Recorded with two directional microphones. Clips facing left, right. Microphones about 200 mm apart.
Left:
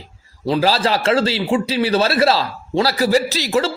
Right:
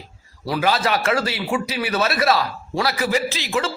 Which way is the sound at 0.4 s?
25° left (ahead or behind).